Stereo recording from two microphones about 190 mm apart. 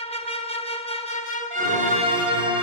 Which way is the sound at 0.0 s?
30° left (ahead or behind).